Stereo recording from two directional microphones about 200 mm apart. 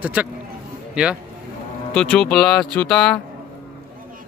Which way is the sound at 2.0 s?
5° left (ahead or behind).